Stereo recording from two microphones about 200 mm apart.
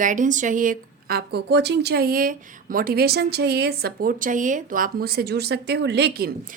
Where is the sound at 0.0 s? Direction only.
40° right (ahead or behind).